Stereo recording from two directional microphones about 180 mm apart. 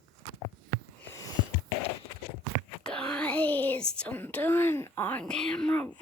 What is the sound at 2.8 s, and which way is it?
Speech, 5° left (ahead or behind).